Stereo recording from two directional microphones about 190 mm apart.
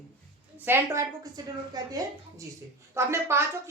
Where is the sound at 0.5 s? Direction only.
10° right (ahead or behind).